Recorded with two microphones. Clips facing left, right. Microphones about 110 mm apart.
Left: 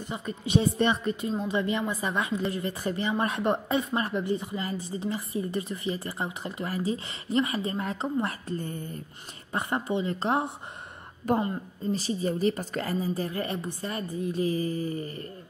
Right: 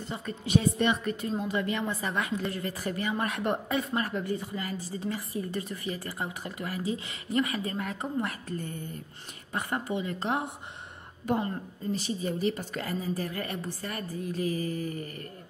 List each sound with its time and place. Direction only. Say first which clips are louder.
0.1 s a woman's voice: left 1 dB; 15° left (ahead or behind); by 10.5 s 30° left (ahead or behind)
11.3 s a woman's voice: left 3 dB; 45° left (ahead or behind); by 15.0 s 30° left (ahead or behind)